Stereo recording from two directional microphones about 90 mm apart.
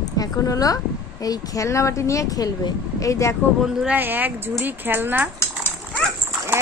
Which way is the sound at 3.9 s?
20° right (ahead or behind).